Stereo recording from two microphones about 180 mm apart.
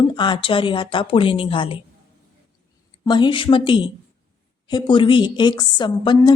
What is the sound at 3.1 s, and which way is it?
Speech, 25° left (ahead or behind).